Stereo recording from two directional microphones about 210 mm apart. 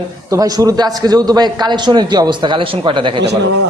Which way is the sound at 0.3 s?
15° right (ahead or behind).